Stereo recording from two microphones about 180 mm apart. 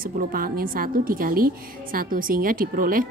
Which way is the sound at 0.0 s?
55° right (ahead or behind).